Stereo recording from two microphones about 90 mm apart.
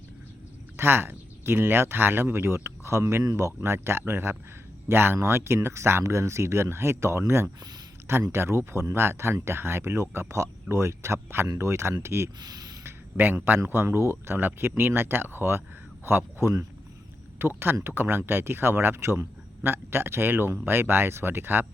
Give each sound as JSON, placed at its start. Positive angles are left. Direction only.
{"t": 0.8, "sound": "speech", "side_deg": -25}
{"t": 12.4, "sound": "speech", "side_deg": -45}
{"t": 12.8, "sound": "a sound", "side_deg": -25}
{"t": 13.7, "sound": "speech", "side_deg": -25}